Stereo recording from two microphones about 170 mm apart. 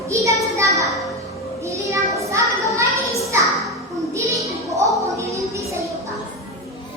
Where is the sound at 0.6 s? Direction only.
20° right (ahead or behind).